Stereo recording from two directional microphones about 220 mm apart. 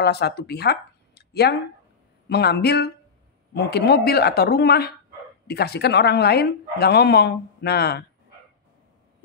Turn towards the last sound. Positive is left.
turn(degrees=45)  # may be behind; listen again after turning